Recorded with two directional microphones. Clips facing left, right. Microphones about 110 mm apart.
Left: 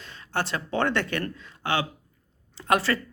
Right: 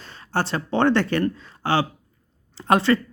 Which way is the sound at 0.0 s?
35° right (ahead or behind).